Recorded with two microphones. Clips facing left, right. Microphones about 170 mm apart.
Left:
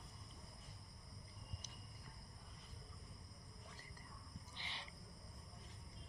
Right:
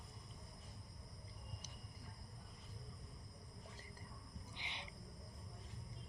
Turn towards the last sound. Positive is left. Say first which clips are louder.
# right 2 dB
turn(degrees=-15)  # may be behind; listen again after turning